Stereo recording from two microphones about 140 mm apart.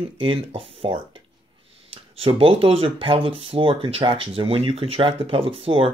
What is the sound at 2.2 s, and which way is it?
Speech, 40° right (ahead or behind).